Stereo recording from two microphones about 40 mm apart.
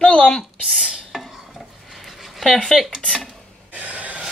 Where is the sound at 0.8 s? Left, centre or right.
Centre.